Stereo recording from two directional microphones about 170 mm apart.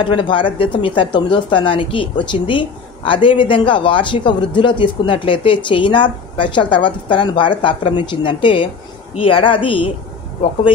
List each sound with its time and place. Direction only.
0.0 s a woman's voice: 30° left (ahead or behind)